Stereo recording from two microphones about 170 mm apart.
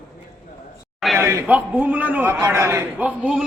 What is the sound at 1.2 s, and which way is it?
A man's voice, 15° right (ahead or behind).